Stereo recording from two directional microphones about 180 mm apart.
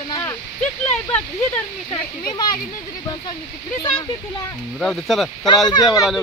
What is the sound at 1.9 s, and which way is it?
Speech, 25° left (ahead or behind).